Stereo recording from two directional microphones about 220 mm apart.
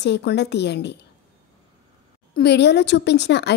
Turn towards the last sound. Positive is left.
turn(degrees=50)  # may be behind; listen again after turning